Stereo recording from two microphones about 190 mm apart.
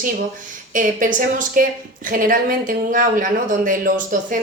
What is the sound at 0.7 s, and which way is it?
Speech, 45° right (ahead or behind).